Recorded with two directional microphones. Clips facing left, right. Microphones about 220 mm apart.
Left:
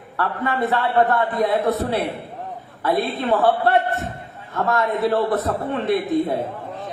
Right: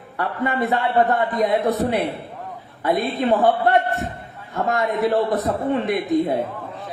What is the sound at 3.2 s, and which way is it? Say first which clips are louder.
A man's voice: right 1 dB; 15° right (ahead or behind).